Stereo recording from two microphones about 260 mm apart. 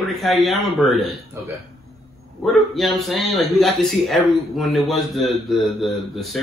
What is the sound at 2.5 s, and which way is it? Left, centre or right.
Speech, centre.